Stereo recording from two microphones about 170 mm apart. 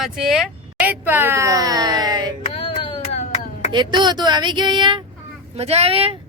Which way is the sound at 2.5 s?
30° left (ahead or behind).